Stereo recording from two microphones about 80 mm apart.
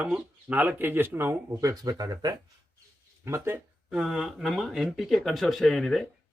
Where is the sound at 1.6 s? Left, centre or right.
Right.